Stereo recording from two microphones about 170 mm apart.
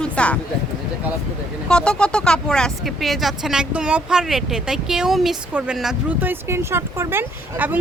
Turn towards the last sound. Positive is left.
turn(degrees=-10)  # may be behind; listen again after turning